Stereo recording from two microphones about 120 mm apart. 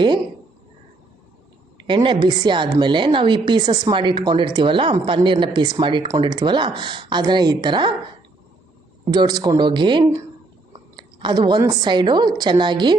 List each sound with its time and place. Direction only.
1.8 s a woman's voice: 40° right (ahead or behind)
9.0 s a woman's voice: 35° right (ahead or behind)
10.9 s chewing: 40° right (ahead or behind)
11.6 s a woman's voice: 35° right (ahead or behind)